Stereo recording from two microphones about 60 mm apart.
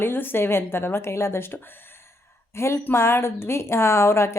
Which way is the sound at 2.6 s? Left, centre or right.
Left.